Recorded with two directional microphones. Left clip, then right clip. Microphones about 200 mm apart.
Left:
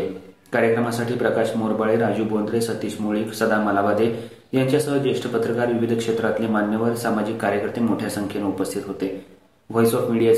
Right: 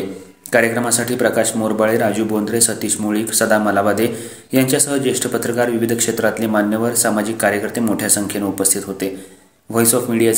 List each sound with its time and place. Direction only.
0.5 s speech: 40° right (ahead or behind)
9.8 s speech: 40° right (ahead or behind)